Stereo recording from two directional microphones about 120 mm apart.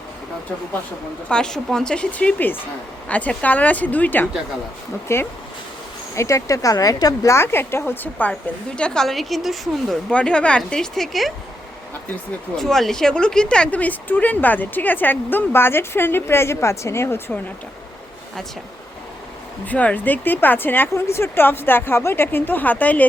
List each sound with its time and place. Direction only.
1.3 s a woman's voice: 5° left (ahead or behind)
12.5 s speech: 5° left (ahead or behind); by 17.3 s 20° left (ahead or behind)
19.6 s speech: 10° left (ahead or behind)